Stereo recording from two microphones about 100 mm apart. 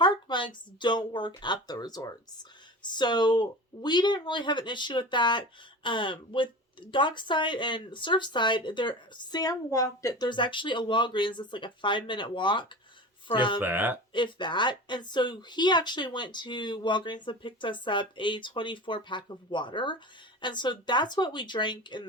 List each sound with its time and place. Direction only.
0.0 s speech: 50° left (ahead or behind)
10.2 s speech: 55° left (ahead or behind)
13.6 s speech: 20° right (ahead or behind)
14.1 s speech: 50° left (ahead or behind)